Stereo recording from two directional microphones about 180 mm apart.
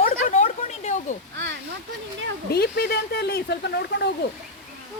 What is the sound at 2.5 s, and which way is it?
Speech, 65° left (ahead or behind).